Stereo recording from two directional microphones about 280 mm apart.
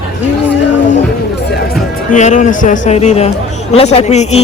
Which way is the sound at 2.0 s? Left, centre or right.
Left.